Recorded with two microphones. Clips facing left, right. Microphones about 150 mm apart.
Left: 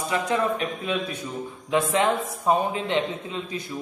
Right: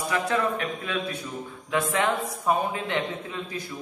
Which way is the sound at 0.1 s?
20° left (ahead or behind).